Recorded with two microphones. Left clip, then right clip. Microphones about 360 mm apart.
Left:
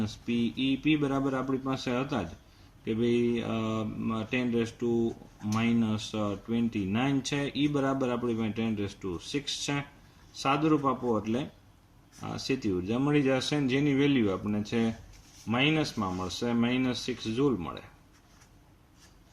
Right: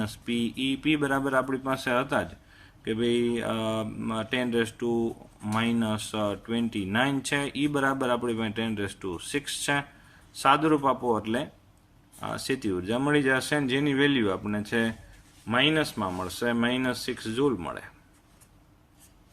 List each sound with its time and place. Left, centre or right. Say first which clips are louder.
0.3 s speech: right 1 dB; right